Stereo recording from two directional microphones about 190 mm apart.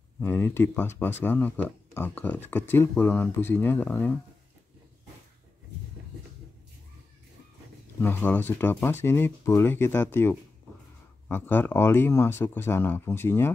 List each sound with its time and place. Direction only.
0.2 s speech: 10° left (ahead or behind)
8.0 s speech: 10° left (ahead or behind)